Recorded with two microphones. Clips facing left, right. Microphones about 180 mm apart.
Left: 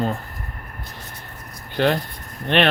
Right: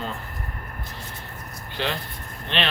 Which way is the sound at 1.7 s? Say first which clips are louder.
Left 9 dB; 55° left (ahead or behind).